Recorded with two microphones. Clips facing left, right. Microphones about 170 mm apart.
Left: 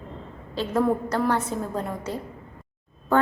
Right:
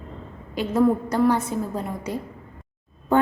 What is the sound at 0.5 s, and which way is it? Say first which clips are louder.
A woman's voice: right 3 dB; 10° right (ahead or behind).